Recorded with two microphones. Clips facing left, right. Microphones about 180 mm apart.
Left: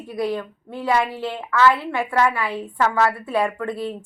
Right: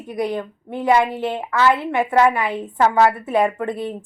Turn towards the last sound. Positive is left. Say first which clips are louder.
# right 3 dB
turn(degrees=-20)  # may be behind; listen again after turning